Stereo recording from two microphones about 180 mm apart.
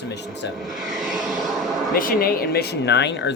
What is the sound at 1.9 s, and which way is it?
Speech, 50° left (ahead or behind).